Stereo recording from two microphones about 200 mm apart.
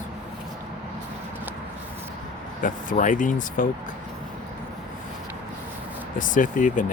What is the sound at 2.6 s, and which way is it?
Speech, 40° left (ahead or behind).